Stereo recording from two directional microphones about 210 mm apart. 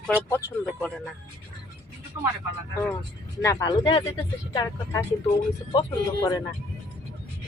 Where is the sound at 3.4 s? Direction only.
15° left (ahead or behind).